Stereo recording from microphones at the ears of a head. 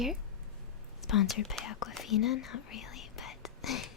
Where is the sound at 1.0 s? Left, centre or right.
Left.